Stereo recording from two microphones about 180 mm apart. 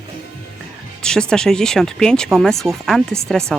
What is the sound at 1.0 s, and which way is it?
Speech, 5° left (ahead or behind).